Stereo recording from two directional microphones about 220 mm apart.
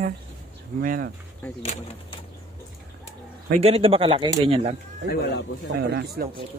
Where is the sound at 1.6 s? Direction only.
30° left (ahead or behind).